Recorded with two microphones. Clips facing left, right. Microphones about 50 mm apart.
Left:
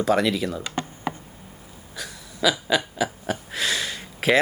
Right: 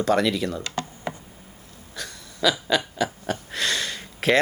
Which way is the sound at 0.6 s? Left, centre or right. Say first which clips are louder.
Left 1 dB; left.